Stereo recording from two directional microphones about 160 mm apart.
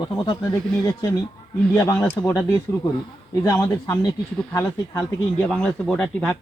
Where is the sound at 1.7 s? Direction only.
15° left (ahead or behind).